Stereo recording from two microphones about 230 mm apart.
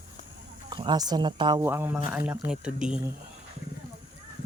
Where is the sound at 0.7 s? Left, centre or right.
Centre.